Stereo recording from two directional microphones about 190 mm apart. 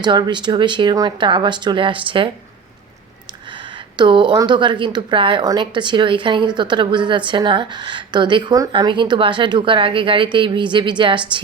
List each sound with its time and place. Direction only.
0.0 s a woman's voice: 25° right (ahead or behind)
3.5 s a woman's voice: 25° right (ahead or behind)